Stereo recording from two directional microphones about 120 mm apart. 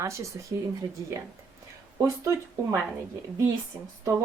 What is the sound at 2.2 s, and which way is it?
Speech, 25° right (ahead or behind).